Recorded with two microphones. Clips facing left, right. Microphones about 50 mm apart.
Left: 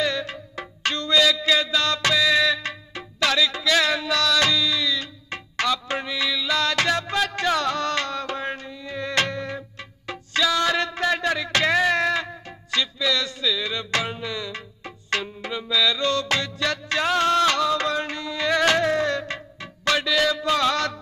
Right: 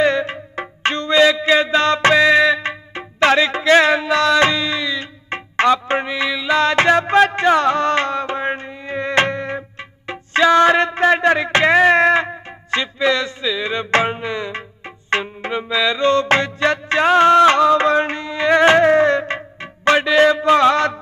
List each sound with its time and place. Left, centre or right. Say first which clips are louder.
0.0 s music: right 9 dB; right